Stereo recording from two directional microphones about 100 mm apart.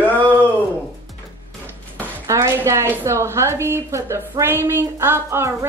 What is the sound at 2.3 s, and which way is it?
A woman's voice, 30° right (ahead or behind).